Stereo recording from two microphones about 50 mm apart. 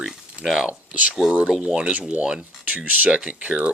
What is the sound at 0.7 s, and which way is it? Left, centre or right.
Speech, right.